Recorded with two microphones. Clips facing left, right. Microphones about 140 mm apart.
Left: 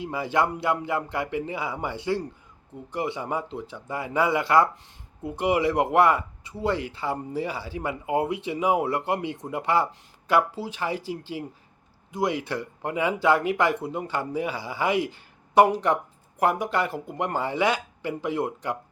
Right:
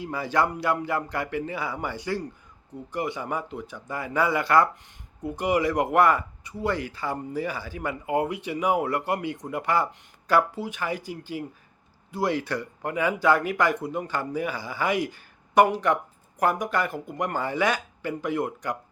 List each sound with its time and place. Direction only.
0.0 s speech: 25° left (ahead or behind)